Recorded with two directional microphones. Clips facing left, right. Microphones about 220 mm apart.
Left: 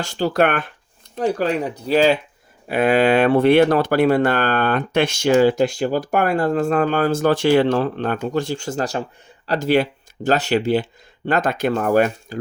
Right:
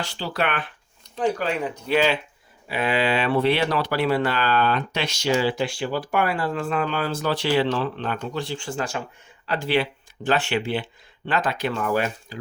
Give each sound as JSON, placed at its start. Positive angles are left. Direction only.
{"t": 0.0, "sound": "speech", "side_deg": 45}
{"t": 2.6, "sound": "speech", "side_deg": 50}